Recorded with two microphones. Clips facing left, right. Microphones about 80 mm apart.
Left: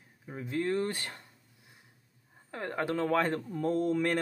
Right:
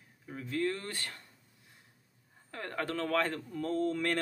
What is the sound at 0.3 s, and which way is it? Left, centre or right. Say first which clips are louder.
Speech: left 2 dB; left.